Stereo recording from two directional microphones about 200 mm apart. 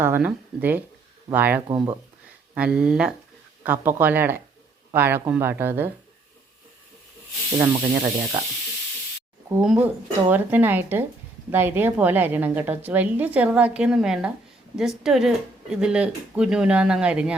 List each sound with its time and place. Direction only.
0.0 s a woman's voice: 10° right (ahead or behind)
7.6 s a woman's voice: 15° right (ahead or behind)
9.5 s a woman's voice: 5° right (ahead or behind)